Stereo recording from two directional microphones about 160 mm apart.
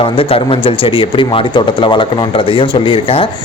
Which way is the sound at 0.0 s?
35° left (ahead or behind).